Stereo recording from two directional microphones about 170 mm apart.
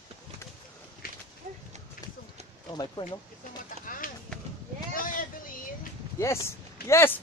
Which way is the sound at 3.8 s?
55° left (ahead or behind).